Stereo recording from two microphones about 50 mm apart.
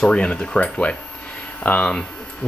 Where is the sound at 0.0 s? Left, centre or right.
Centre.